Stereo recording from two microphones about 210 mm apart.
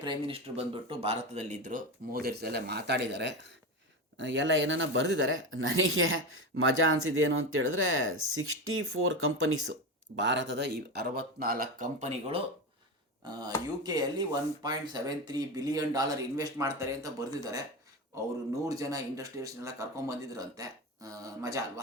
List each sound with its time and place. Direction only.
0.0 s speech: 25° right (ahead or behind); by 9.7 s 75° right (ahead or behind)
10.2 s speech: 60° right (ahead or behind); by 12.4 s 35° right (ahead or behind)
13.8 s speech: 20° right (ahead or behind)
18.7 s speech: 15° right (ahead or behind)